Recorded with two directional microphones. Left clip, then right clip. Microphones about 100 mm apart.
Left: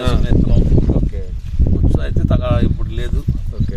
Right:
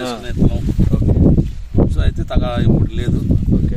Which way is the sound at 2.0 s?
10° right (ahead or behind).